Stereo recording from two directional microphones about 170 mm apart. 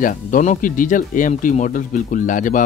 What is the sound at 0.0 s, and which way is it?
Speech, 50° left (ahead or behind).